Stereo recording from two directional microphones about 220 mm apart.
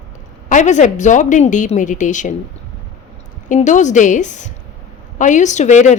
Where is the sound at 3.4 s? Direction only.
35° left (ahead or behind).